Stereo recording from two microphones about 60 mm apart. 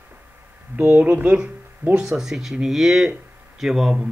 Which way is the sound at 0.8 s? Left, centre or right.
Right.